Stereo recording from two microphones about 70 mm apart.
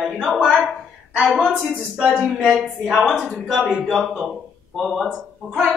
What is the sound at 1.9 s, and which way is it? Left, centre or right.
A man's voice, centre.